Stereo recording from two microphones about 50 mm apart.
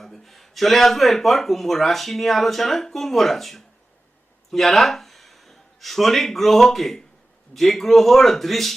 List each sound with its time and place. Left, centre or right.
0.0 s a man's voice: centre